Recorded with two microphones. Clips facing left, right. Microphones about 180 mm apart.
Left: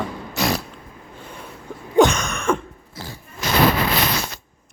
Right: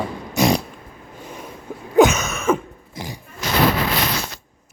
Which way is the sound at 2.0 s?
5° right (ahead or behind).